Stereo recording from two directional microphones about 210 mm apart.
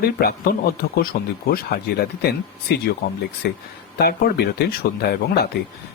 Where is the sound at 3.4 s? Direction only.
50° left (ahead or behind).